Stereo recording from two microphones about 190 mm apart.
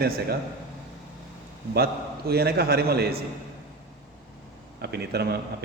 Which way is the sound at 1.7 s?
55° right (ahead or behind).